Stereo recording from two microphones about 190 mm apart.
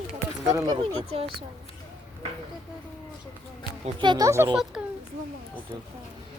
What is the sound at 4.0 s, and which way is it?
Speech, 20° right (ahead or behind).